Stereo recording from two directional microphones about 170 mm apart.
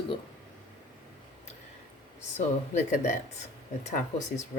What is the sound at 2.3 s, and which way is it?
Speech, 45° left (ahead or behind).